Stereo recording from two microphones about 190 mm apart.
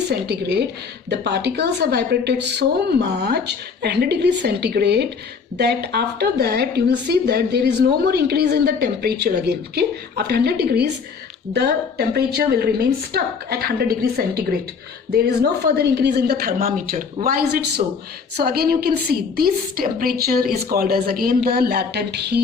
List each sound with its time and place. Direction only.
0.1 s a woman's voice: 60° right (ahead or behind)
17.8 s speech: 25° right (ahead or behind)
18.3 s a woman's voice: 55° right (ahead or behind)